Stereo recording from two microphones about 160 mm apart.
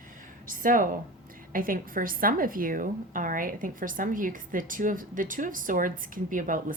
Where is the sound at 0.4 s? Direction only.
55° right (ahead or behind).